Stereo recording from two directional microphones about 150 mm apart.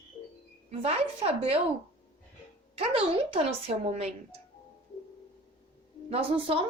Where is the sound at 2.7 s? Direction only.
40° right (ahead or behind).